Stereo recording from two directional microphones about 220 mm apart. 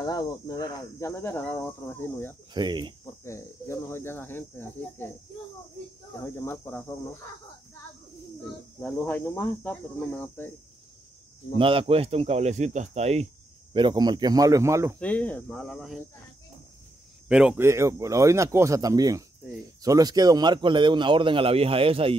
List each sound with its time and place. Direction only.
0.0 s speech: 15° left (ahead or behind)
2.5 s a man's voice: 20° right (ahead or behind)
3.3 s speech: 10° left (ahead or behind)
6.2 s speech: 10° left (ahead or behind)
8.8 s speech: 10° left (ahead or behind)
11.5 s a man's voice: 25° right (ahead or behind)
15.0 s speech: 5° left (ahead or behind)
17.3 s a man's voice: 5° right (ahead or behind); by 22.1 s 25° right (ahead or behind)